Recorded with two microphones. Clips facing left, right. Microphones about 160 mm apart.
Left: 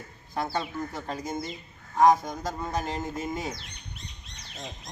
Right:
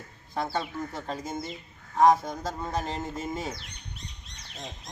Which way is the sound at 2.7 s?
25° right (ahead or behind).